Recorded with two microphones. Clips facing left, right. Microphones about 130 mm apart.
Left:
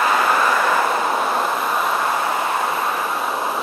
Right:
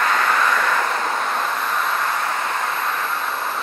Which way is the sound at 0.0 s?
10° left (ahead or behind).